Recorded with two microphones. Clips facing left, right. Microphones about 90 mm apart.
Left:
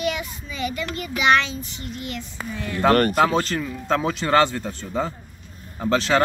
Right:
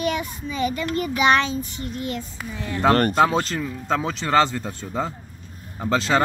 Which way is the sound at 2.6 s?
20° right (ahead or behind).